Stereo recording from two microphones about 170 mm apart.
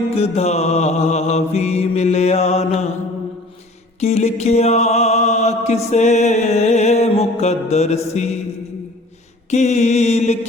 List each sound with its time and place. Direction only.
0.1 s mantra: 40° left (ahead or behind)
4.0 s mantra: 40° left (ahead or behind)
9.5 s mantra: 45° left (ahead or behind)